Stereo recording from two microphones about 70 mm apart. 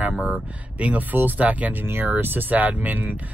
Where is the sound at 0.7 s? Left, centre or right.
Right.